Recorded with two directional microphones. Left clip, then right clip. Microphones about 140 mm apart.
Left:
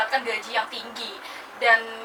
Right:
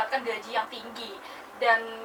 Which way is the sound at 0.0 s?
15° right (ahead or behind).